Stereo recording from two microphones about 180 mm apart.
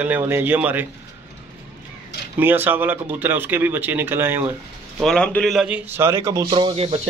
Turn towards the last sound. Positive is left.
turn(degrees=-30)  # may be behind; listen again after turning